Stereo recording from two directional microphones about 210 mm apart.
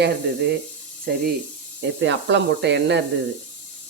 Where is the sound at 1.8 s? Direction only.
60° right (ahead or behind).